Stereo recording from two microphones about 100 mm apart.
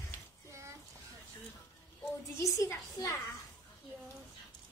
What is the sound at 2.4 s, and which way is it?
Speech, 35° left (ahead or behind).